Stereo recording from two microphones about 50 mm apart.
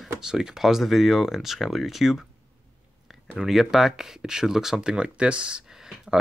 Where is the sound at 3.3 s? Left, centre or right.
Centre; by 5.9 s right.